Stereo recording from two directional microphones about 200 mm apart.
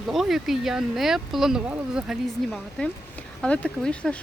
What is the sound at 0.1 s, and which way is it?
Speech, centre (ahead or behind).